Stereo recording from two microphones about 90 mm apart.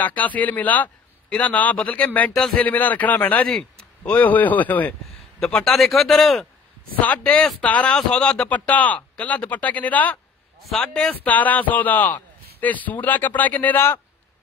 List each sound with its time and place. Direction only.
0.0 s a man's voice: 15° left (ahead or behind)
5.4 s speech: 5° left (ahead or behind)
7.0 s a man's voice: 15° left (ahead or behind)
10.6 s a man's voice: 5° left (ahead or behind)